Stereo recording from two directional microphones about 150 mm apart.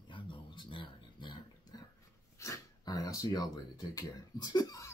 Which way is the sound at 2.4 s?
25° left (ahead or behind).